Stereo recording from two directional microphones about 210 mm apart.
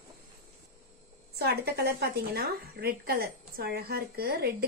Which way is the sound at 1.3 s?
50° right (ahead or behind).